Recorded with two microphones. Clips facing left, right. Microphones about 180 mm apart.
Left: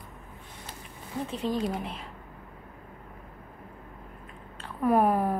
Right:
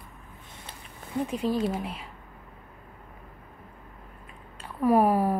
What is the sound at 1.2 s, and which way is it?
Speech, 10° right (ahead or behind).